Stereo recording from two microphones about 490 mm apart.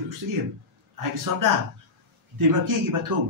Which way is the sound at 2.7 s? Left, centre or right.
Right.